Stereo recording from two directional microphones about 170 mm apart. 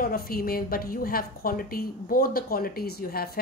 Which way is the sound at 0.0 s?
60° left (ahead or behind).